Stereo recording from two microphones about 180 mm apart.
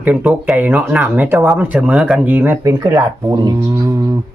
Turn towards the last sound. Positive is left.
turn(degrees=-15)  # may be behind; listen again after turning